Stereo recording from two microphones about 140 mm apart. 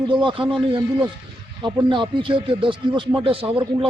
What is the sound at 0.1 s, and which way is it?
Speech, 35° right (ahead or behind).